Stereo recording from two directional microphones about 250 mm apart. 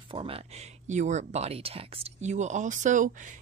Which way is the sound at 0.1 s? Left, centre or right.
Right.